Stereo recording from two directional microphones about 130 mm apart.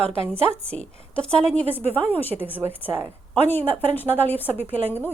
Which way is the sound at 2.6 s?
15° right (ahead or behind).